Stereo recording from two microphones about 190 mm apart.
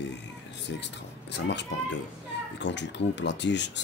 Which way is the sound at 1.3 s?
65° left (ahead or behind).